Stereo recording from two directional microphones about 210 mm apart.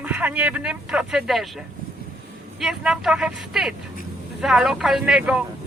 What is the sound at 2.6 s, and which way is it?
Speech, centre (ahead or behind).